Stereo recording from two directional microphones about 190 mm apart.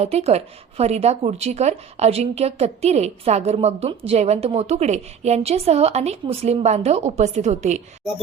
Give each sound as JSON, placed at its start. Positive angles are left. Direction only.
{"t": 0.0, "sound": "a woman's voice", "side_deg": -35}